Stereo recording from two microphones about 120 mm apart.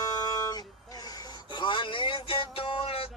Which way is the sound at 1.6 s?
45° left (ahead or behind).